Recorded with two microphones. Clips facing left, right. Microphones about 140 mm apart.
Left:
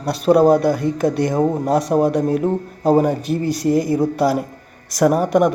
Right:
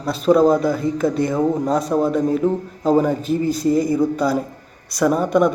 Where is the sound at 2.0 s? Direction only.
80° left.